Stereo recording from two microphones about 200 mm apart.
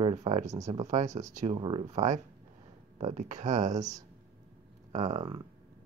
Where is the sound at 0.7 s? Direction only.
35° right (ahead or behind).